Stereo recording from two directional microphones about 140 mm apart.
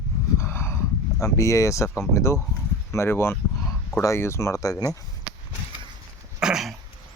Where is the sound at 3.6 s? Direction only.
Centre (ahead or behind).